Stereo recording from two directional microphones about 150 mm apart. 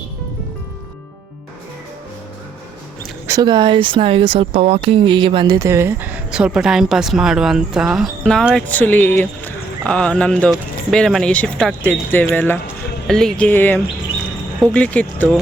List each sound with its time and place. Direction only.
3.2 s speech: 25° right (ahead or behind)
5.5 s speech: 20° right (ahead or behind); by 15.4 s 10° left (ahead or behind)